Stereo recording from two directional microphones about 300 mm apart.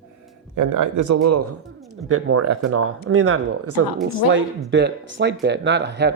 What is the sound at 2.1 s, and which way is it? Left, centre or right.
Speech, right.